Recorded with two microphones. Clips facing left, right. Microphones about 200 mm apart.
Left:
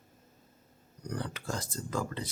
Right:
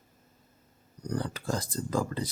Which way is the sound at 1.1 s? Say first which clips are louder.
Right 5 dB; 35° right (ahead or behind).